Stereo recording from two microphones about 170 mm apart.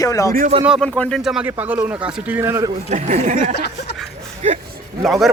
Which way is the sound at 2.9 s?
45° right (ahead or behind).